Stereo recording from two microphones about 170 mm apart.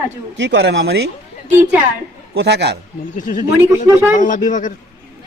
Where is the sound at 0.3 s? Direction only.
90° right.